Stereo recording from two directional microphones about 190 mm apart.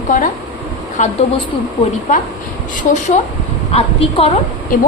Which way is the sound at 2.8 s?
40° left (ahead or behind).